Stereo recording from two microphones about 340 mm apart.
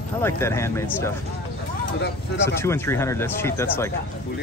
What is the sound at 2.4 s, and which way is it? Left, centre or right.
Speech, centre.